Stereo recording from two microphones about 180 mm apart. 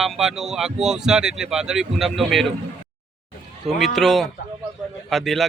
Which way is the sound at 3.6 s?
Centre (ahead or behind).